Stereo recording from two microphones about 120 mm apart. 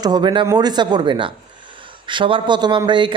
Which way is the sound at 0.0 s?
35° right (ahead or behind).